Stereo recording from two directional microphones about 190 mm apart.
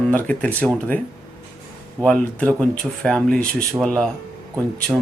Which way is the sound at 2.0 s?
5° left (ahead or behind).